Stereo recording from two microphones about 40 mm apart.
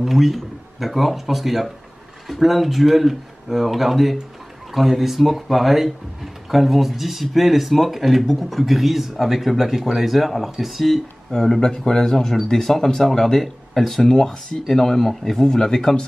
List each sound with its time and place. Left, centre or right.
0.0 s speech: centre
11.3 s speech: centre